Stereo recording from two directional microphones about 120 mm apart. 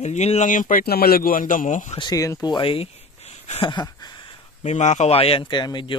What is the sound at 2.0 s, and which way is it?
Speech, 30° left (ahead or behind).